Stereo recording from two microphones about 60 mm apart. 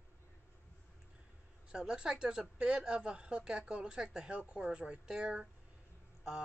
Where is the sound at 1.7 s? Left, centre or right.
Centre.